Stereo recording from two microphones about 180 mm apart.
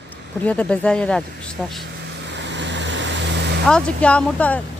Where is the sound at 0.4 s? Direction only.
5° left (ahead or behind).